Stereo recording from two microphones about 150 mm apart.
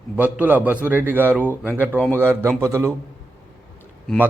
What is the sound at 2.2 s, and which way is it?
Speech, 15° right (ahead or behind).